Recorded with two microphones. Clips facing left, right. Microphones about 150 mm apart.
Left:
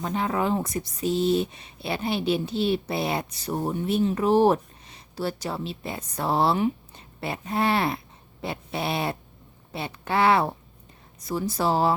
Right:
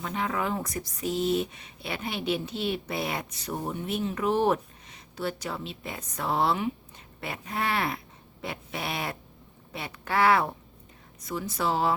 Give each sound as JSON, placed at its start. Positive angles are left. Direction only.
{"t": 0.0, "sound": "speech", "side_deg": 30}